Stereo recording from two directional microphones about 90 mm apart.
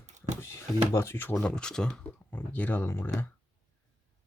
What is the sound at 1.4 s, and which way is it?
Speech, 10° left (ahead or behind).